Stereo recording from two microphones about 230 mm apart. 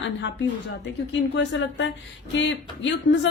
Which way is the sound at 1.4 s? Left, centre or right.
Left.